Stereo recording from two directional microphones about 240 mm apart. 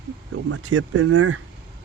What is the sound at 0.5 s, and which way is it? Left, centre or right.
Speech, right.